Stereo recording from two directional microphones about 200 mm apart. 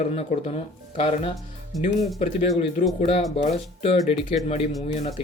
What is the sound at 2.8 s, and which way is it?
Speech, 45° left (ahead or behind).